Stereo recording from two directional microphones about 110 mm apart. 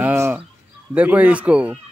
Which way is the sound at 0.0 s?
20° right (ahead or behind).